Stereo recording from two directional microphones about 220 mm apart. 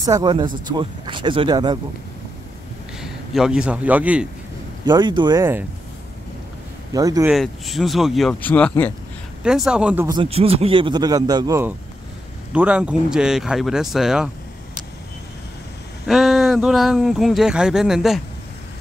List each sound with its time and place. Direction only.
0.0 s a man's voice: 20° right (ahead or behind)
3.0 s speech: 5° right (ahead or behind)
4.8 s a man's voice: 20° right (ahead or behind)
6.9 s speech: 15° right (ahead or behind)
7.2 s speech: centre (ahead or behind)
10.0 s a man's voice: 25° right (ahead or behind); by 14.3 s 5° right (ahead or behind)
16.1 s speech: centre (ahead or behind)